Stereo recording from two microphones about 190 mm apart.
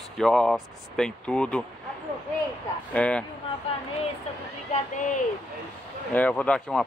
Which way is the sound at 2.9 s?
5° left (ahead or behind).